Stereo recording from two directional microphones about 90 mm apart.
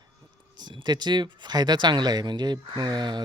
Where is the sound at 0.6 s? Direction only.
55° right (ahead or behind).